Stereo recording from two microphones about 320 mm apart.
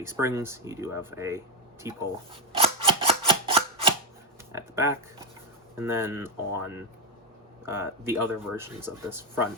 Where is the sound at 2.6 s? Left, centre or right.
Centre.